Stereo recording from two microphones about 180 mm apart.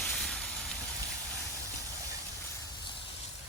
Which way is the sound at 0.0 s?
Centre (ahead or behind).